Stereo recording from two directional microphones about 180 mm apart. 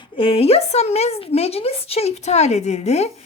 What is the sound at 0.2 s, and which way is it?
A woman's voice, 30° left (ahead or behind).